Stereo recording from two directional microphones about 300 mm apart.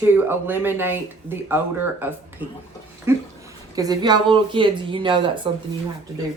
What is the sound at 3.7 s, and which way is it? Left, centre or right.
Speech, centre.